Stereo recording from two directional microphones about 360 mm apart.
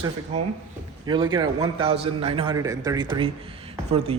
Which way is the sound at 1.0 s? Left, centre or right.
Centre.